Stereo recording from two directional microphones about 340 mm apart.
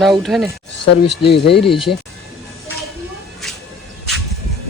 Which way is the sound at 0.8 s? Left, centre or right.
Left.